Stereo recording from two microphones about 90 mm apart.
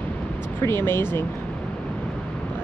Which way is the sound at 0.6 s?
25° left (ahead or behind).